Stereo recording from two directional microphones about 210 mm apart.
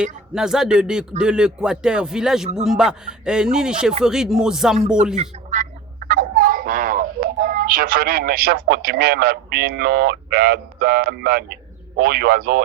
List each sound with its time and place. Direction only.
0.0 s speech: 5° right (ahead or behind)
5.1 s speech: 35° right (ahead or behind)